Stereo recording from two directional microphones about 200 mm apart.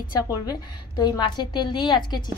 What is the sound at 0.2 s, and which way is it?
A woman's voice, 20° left (ahead or behind).